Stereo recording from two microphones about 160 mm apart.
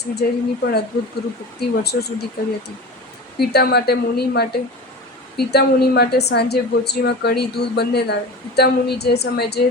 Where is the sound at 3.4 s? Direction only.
80° left.